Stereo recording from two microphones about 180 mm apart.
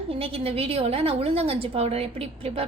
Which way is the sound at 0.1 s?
30° right (ahead or behind).